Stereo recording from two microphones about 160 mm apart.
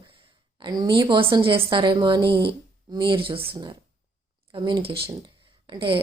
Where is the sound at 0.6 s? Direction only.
25° right (ahead or behind).